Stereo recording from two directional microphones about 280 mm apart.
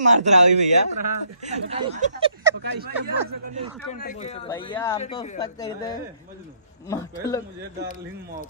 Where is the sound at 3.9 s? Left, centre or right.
Left.